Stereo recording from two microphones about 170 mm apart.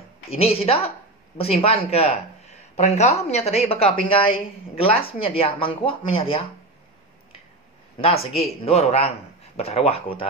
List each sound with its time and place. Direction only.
0.3 s a woman's voice: 35° left (ahead or behind)
8.0 s a woman's voice: 35° left (ahead or behind)